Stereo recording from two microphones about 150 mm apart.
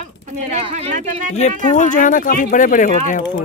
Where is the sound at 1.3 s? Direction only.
50° left (ahead or behind).